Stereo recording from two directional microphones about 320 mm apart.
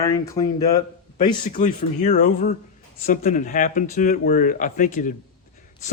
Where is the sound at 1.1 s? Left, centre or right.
Left.